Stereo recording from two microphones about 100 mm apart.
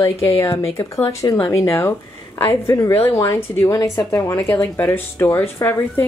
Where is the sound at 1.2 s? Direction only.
40° left (ahead or behind).